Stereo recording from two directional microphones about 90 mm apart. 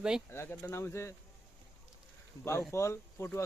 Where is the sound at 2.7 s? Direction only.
30° left (ahead or behind).